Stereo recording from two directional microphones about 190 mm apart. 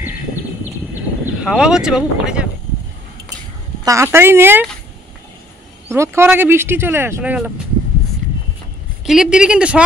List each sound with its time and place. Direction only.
1.4 s speech: 5° right (ahead or behind)
3.8 s speech: 15° right (ahead or behind)
5.9 s speech: 15° right (ahead or behind)
9.0 s speech: 5° right (ahead or behind)